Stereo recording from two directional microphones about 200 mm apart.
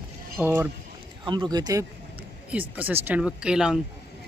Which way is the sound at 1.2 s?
20° right (ahead or behind).